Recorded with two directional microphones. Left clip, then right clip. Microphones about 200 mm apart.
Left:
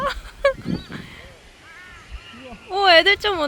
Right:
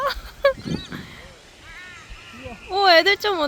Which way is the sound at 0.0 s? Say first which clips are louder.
Even; 5° right (ahead or behind).